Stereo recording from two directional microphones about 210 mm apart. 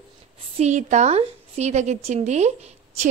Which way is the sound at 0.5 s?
35° right (ahead or behind).